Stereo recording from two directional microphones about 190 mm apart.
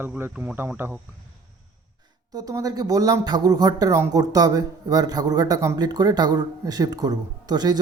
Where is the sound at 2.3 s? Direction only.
20° right (ahead or behind).